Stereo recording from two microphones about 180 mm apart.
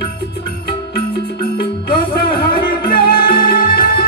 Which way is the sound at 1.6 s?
60° left (ahead or behind).